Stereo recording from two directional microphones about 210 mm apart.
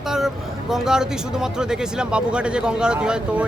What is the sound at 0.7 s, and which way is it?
Speech, 5° right (ahead or behind).